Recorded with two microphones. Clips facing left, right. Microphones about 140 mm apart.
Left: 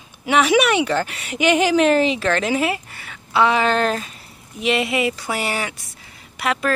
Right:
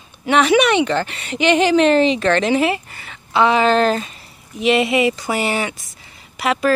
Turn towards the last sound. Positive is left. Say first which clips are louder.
# right 4 dB
turn(degrees=0)  # may be behind; listen again after turning